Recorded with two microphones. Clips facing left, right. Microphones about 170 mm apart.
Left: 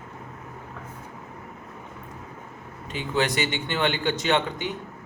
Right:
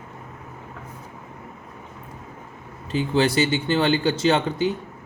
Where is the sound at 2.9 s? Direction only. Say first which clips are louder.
Right 5 dB; 30° right (ahead or behind).